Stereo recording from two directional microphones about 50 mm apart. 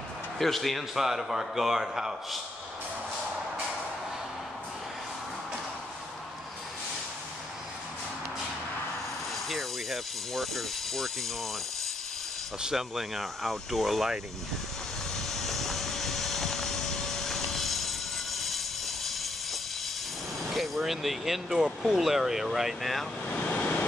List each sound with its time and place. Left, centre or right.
0.4 s a man's voice: centre
9.3 s speech: centre
12.6 s speech: centre
15.1 s vehicle: centre
20.4 s speech: centre
23.2 s speech: left
23.5 s vehicle: left